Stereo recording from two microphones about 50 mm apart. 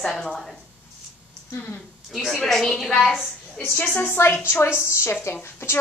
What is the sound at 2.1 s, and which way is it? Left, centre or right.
A woman's voice, centre.